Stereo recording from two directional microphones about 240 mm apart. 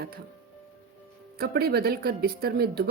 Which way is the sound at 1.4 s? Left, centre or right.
Right.